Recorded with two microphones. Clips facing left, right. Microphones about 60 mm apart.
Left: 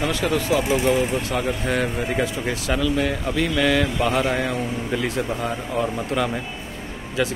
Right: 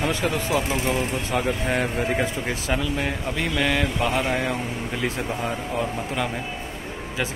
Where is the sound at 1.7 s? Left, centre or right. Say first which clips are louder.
Even; centre.